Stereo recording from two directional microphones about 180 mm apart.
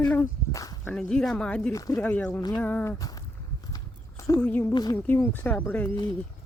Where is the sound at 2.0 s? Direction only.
10° left (ahead or behind).